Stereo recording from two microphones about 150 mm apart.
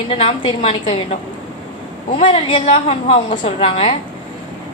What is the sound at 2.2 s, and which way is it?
A woman's voice, 40° left (ahead or behind).